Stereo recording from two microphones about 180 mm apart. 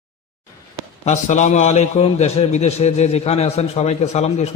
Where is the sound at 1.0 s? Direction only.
40° left (ahead or behind).